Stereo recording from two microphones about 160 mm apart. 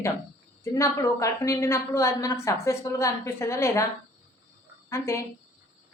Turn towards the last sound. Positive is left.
turn(degrees=15)  # may be behind; listen again after turning